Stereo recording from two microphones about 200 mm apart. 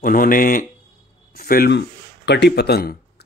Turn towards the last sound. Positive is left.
turn(degrees=50)  # may be behind; listen again after turning